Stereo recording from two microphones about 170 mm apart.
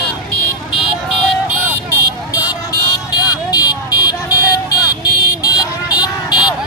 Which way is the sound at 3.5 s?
25° left (ahead or behind).